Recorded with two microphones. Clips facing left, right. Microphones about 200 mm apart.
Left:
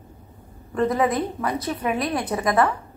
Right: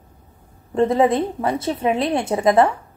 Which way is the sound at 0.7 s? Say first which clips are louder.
Right 5 dB; 25° right (ahead or behind).